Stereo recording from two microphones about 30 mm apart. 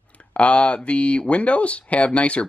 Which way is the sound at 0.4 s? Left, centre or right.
Left.